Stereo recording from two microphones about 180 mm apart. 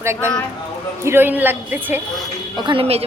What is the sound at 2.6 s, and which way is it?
Speech, 30° right (ahead or behind).